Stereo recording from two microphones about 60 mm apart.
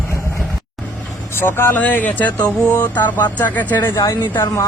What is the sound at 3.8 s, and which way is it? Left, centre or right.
Speech, left.